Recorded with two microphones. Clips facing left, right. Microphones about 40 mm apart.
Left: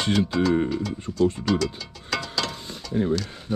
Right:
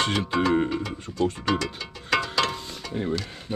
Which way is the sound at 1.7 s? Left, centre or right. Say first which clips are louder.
Right 4 dB; right.